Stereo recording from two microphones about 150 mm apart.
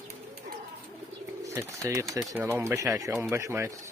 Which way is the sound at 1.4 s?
20° right (ahead or behind).